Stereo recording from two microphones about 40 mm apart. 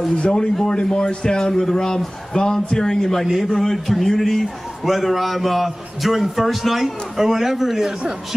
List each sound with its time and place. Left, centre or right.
0.2 s a man's voice: left; by 7.9 s centre